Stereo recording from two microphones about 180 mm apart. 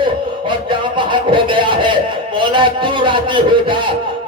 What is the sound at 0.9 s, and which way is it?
Speech, 25° right (ahead or behind).